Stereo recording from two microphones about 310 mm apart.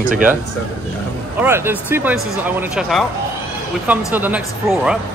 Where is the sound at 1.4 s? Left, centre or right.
Centre.